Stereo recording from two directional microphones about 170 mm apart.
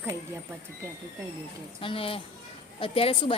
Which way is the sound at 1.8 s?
30° left (ahead or behind).